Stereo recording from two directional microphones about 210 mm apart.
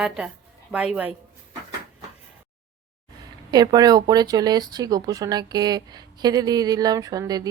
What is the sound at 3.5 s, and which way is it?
Speech, 20° right (ahead or behind).